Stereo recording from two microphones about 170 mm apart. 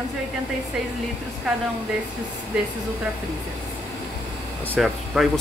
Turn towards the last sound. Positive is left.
turn(degrees=0)  # may be behind; listen again after turning